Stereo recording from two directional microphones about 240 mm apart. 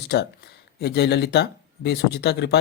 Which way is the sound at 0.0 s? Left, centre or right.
Left.